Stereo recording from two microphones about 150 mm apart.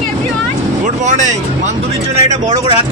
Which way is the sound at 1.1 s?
55° right (ahead or behind).